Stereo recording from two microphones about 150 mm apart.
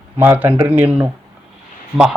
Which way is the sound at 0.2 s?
15° right (ahead or behind).